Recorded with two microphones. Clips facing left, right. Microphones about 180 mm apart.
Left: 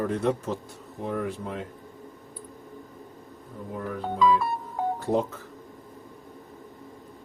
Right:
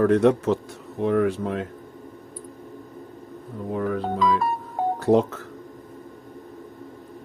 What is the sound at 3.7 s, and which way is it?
Music, 75° right (ahead or behind).